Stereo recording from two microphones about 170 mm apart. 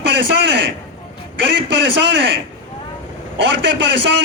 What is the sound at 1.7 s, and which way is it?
A man's voice, 90° right.